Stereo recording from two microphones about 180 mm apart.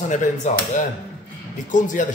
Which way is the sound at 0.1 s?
45° left (ahead or behind).